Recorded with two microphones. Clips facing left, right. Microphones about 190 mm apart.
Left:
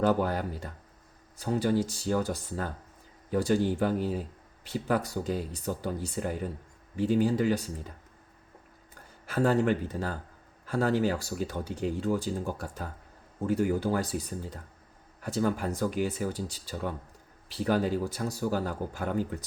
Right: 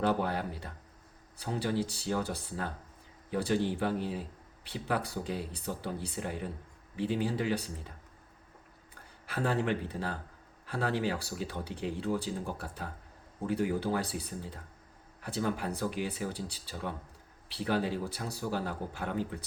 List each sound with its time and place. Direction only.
0.0 s speech: 45° left (ahead or behind)
9.2 s speech: 45° left (ahead or behind)